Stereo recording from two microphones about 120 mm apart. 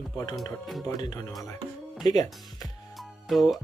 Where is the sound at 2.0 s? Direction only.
35° left (ahead or behind).